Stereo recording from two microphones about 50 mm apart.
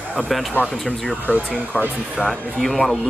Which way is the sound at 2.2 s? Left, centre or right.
Left.